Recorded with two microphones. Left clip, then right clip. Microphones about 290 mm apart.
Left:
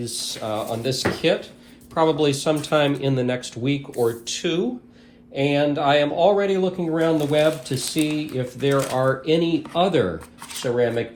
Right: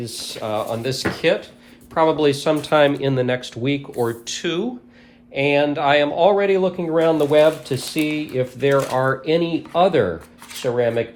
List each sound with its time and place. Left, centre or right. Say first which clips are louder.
0.0 s speech: right 1 dB; right